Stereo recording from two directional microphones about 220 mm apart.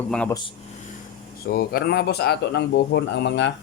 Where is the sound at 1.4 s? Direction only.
45° left (ahead or behind).